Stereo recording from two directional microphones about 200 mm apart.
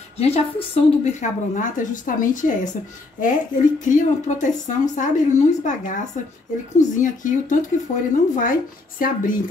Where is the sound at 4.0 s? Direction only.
40° left (ahead or behind).